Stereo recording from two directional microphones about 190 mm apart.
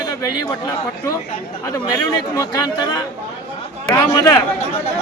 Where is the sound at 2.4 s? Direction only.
20° left (ahead or behind).